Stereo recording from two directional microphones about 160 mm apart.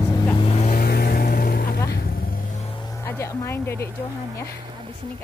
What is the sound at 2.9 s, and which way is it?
Speech, 15° left (ahead or behind).